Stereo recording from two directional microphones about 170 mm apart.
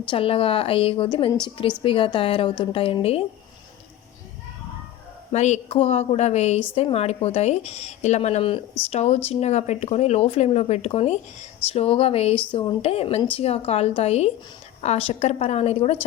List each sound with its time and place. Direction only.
0.1 s speech: 35° left (ahead or behind)
5.3 s speech: 40° left (ahead or behind)